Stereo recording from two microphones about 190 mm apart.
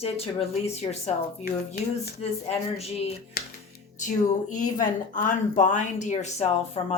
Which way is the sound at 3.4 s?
50° left (ahead or behind).